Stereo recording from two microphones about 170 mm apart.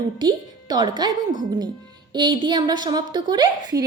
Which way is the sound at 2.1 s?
25° right (ahead or behind).